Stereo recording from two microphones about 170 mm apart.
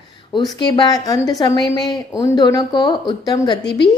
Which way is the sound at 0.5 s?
25° left (ahead or behind).